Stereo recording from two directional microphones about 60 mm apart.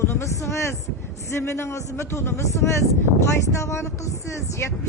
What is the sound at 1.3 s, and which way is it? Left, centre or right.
A woman's voice, left.